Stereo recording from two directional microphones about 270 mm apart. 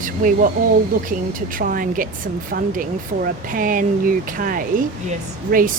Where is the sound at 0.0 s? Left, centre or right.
Right.